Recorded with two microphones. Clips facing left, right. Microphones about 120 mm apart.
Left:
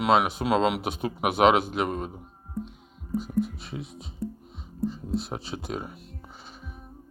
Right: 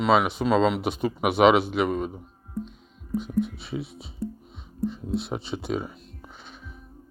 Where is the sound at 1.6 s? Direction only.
45° left (ahead or behind).